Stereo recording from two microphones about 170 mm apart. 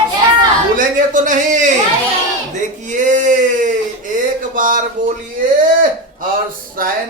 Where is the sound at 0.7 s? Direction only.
50° right (ahead or behind).